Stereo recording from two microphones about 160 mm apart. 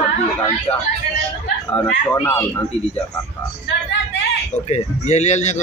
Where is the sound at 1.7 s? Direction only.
10° left (ahead or behind).